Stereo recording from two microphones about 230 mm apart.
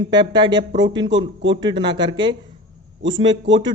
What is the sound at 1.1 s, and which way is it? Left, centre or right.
Speech, right.